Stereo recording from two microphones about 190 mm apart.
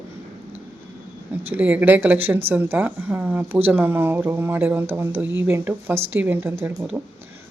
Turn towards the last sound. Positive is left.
turn(degrees=-5)  # may be behind; listen again after turning